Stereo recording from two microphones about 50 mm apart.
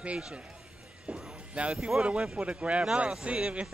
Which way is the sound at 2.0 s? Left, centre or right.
Right.